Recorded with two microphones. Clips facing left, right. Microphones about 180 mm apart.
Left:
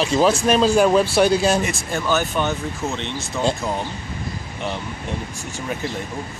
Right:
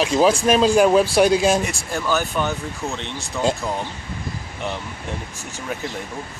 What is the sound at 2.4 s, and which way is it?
Speech, 20° left (ahead or behind).